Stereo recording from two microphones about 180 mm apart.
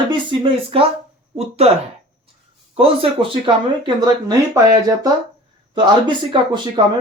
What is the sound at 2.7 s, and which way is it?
Speech, 30° right (ahead or behind).